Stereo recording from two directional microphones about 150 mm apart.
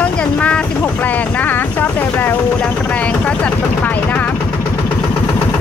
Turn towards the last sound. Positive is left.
turn(degrees=10)  # may be behind; listen again after turning